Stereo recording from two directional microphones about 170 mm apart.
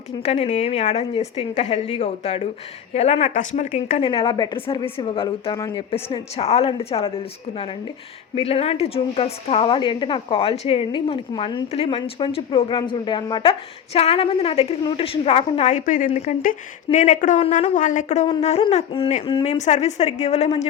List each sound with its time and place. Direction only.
0.2 s a woman's voice: 40° left (ahead or behind)
4.0 s a woman's voice: 30° left (ahead or behind)
8.4 s a woman's voice: 35° left (ahead or behind)